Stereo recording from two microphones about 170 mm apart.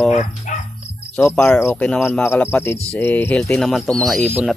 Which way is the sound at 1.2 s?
5° left (ahead or behind).